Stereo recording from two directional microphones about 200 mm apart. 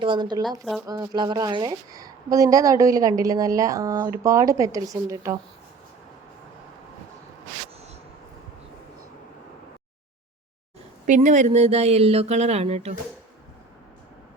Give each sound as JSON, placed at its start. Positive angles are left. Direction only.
{"t": 0.0, "sound": "a woman's voice", "side_deg": -25}
{"t": 11.0, "sound": "speech", "side_deg": -40}